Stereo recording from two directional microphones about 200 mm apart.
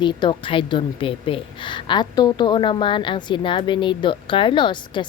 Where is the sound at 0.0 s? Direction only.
25° left (ahead or behind).